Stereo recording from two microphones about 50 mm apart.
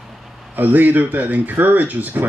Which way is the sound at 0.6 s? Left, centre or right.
Right.